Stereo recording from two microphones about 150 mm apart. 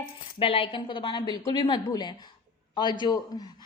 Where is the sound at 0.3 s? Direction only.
35° left (ahead or behind).